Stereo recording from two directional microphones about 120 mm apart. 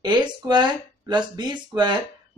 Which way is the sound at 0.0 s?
40° right (ahead or behind).